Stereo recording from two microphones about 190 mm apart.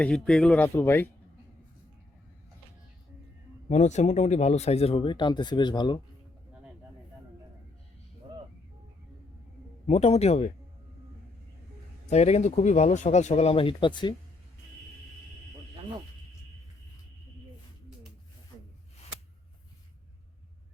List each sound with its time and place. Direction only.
0.0 s speech: 5° left (ahead or behind)
3.7 s speech: 40° left (ahead or behind)
9.8 s speech: 35° left (ahead or behind)
12.0 s speech: 35° left (ahead or behind)